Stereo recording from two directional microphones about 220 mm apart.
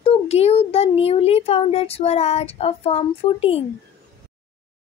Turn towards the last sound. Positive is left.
turn(degrees=25)  # may be behind; listen again after turning